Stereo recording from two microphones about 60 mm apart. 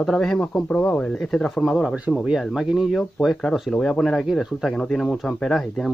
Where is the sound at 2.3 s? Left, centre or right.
Centre.